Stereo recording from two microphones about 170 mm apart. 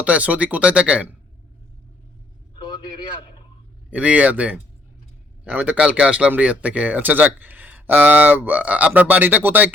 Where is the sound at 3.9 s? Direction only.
10° right (ahead or behind).